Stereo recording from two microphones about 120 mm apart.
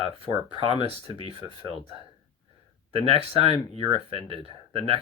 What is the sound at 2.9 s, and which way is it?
Speech, 55° right (ahead or behind).